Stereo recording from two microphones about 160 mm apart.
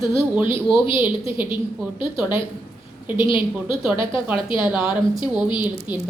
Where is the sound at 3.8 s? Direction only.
Centre (ahead or behind).